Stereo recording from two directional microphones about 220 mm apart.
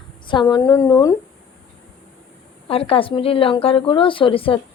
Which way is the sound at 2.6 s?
25° left (ahead or behind).